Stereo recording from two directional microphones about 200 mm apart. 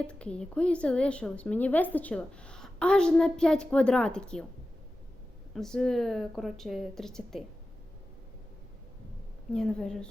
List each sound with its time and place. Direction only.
0.1 s a woman's voice: 5° left (ahead or behind)
5.5 s a woman's voice: 5° left (ahead or behind)
9.5 s a woman's voice: 5° left (ahead or behind)